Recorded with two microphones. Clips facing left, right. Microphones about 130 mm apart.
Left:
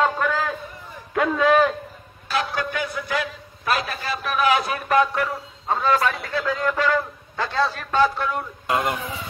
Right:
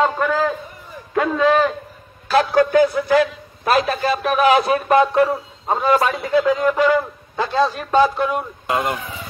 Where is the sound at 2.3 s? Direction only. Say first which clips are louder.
Right 11 dB; 35° right (ahead or behind).